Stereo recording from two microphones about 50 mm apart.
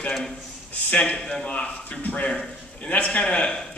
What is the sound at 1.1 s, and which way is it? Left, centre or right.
A man's voice, centre.